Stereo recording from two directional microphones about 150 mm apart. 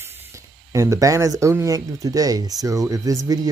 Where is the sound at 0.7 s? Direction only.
20° right (ahead or behind).